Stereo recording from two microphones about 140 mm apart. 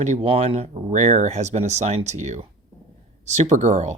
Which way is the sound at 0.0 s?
50° right (ahead or behind).